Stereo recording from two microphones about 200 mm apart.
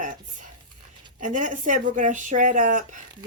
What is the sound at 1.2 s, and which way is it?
Speech, 40° right (ahead or behind).